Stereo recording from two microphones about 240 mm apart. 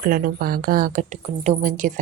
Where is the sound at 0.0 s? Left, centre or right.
Right.